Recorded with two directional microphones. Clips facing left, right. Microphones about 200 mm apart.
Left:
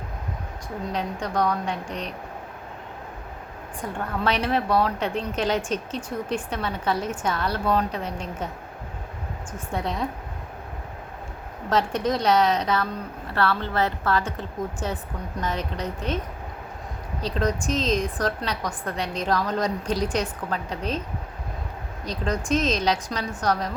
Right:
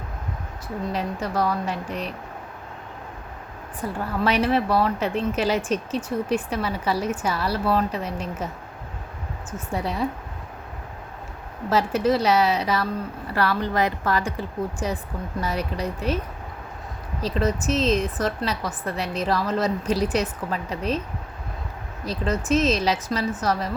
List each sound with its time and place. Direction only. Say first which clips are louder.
0.9 s a woman's voice: even; 5° right (ahead or behind)
3.8 s a woman's voice: right 3 dB; 5° right (ahead or behind)
9.5 s a woman's voice: right 1 dB; 5° right (ahead or behind)
11.7 s a woman's voice: right 3 dB; 5° right (ahead or behind)
17.2 s a woman's voice: right 2 dB; 5° right (ahead or behind)
22.0 s a woman's voice: right 2 dB; 5° right (ahead or behind)